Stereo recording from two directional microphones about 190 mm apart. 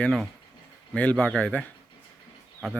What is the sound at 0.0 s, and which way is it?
Speech, centre (ahead or behind).